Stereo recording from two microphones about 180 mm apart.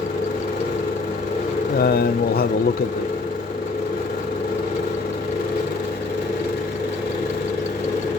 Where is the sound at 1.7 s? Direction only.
60° left (ahead or behind).